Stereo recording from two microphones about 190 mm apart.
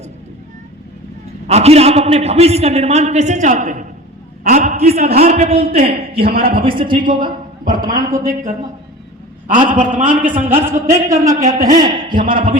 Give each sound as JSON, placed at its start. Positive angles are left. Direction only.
{"t": 1.5, "sound": "a man's voice", "side_deg": -35}
{"t": 6.3, "sound": "speech", "side_deg": -50}
{"t": 6.6, "sound": "a woman's voice", "side_deg": -25}
{"t": 7.1, "sound": "a man's voice", "side_deg": -45}
{"t": 7.8, "sound": "a woman's voice", "side_deg": -20}
{"t": 9.7, "sound": "a man's voice", "side_deg": -40}
{"t": 10.1, "sound": "speech", "side_deg": -10}
{"t": 11.4, "sound": "a man's voice", "side_deg": -40}